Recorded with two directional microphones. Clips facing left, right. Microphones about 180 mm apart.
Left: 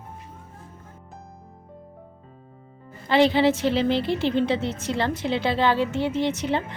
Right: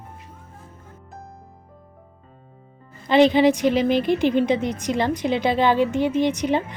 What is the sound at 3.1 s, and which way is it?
A woman's voice, 20° right (ahead or behind).